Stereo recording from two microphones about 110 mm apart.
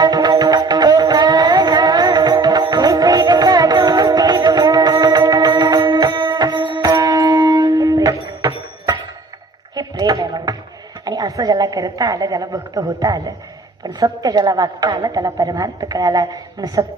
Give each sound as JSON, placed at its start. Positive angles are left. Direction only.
{"t": 0.0, "sound": "music", "side_deg": -40}
{"t": 6.9, "sound": "shofar", "side_deg": -30}
{"t": 9.7, "sound": "a sound", "side_deg": -40}
{"t": 11.0, "sound": "a woman's voice", "side_deg": -35}